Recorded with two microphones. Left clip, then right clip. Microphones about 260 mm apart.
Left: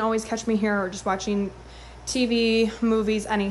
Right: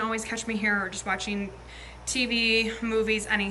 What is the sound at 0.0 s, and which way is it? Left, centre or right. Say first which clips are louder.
A woman's voice: left 5 dB; centre.